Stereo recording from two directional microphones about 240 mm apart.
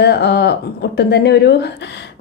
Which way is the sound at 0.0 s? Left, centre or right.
Left.